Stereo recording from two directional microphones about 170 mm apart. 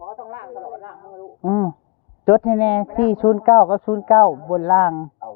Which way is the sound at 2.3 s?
35° left (ahead or behind).